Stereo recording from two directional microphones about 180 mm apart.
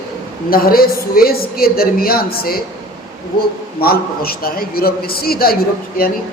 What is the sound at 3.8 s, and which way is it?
A woman's voice, 55° left (ahead or behind).